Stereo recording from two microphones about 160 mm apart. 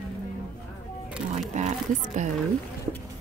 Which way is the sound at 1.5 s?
45° right (ahead or behind).